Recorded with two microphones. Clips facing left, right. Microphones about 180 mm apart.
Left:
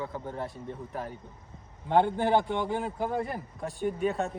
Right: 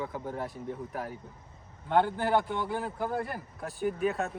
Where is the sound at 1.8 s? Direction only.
20° left (ahead or behind).